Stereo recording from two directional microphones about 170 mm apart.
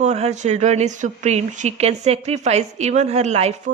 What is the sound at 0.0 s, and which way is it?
A woman's voice, 40° right (ahead or behind).